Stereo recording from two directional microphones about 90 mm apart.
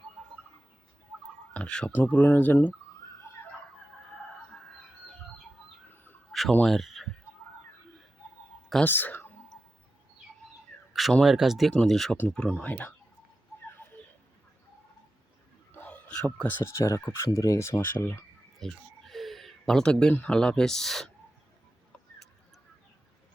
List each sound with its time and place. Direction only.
1.5 s speech: 10° left (ahead or behind)
6.7 s speech: centre (ahead or behind)
8.8 s speech: 20° left (ahead or behind)
10.9 s speech: centre (ahead or behind)
12.3 s speech: 15° left (ahead or behind)
15.7 s a sound: 20° left (ahead or behind)
16.0 s a man's voice: 10° left (ahead or behind)
16.7 s speech: 30° left (ahead or behind)
18.6 s a sound: centre (ahead or behind)
20.1 s speech: 10° left (ahead or behind)